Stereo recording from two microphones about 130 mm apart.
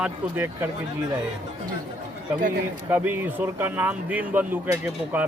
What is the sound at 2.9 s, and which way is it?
Speech, 15° right (ahead or behind).